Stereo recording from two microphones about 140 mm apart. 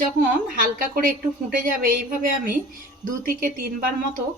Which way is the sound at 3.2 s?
90° right.